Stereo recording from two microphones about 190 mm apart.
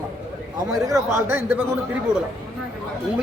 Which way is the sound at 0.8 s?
15° right (ahead or behind).